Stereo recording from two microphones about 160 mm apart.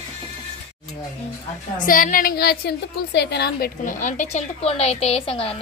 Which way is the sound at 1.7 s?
60° left (ahead or behind).